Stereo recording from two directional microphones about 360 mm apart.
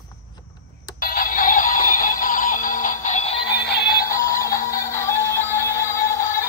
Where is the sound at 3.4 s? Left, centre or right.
Left.